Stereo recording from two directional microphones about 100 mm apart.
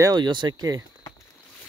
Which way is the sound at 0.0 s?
45° right (ahead or behind).